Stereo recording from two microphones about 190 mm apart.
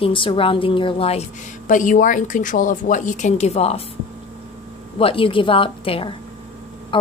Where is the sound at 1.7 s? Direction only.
45° left (ahead or behind).